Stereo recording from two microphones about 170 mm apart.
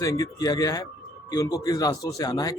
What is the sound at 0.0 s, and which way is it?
A man's voice, 20° left (ahead or behind).